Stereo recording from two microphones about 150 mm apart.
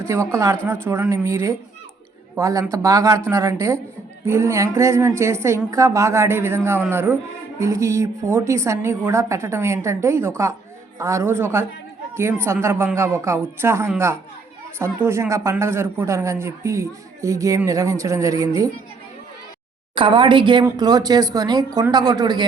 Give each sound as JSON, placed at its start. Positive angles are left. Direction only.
{"t": 0.0, "sound": "a woman's voice", "side_deg": -15}
{"t": 20.0, "sound": "a man's voice", "side_deg": -30}